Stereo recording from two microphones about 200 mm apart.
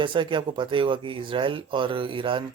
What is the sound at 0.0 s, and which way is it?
Speech, 25° right (ahead or behind).